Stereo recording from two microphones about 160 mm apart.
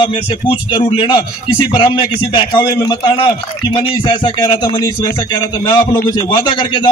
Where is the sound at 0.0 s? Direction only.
30° left (ahead or behind).